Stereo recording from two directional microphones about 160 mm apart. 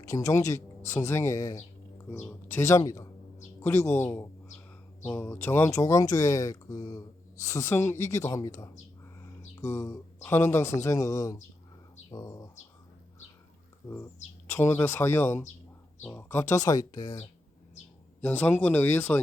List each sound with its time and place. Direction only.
0.0 s speech: 20° left (ahead or behind)
14.4 s speech: 15° left (ahead or behind)
18.2 s speech: 10° left (ahead or behind)